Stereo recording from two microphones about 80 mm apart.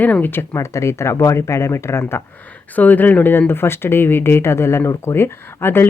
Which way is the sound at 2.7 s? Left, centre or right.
Left.